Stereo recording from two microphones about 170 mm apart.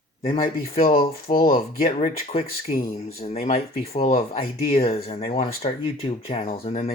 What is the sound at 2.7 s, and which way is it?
Speech, 60° left (ahead or behind).